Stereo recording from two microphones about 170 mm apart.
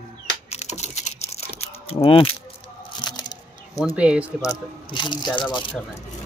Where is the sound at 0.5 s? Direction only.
40° left (ahead or behind).